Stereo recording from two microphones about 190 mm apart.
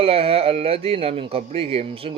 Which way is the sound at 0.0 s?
30° right (ahead or behind).